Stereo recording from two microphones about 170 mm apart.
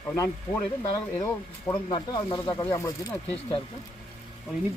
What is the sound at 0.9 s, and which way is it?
Speech, 20° left (ahead or behind).